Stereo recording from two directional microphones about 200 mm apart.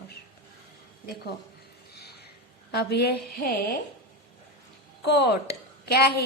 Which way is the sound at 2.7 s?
55° left (ahead or behind).